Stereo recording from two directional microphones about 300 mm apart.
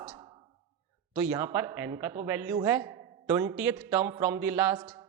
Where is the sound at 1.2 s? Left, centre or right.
Centre.